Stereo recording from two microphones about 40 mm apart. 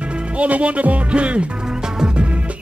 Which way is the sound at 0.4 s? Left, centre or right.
Right.